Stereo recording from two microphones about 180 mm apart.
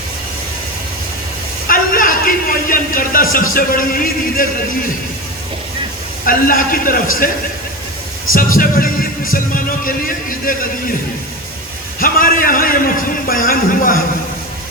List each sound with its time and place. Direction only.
1.6 s a sound: 50° left (ahead or behind)
3.3 s speech: 50° left (ahead or behind)
6.2 s speech: 50° left (ahead or behind)
8.3 s speech: 50° left (ahead or behind)
11.9 s speech: 50° left (ahead or behind)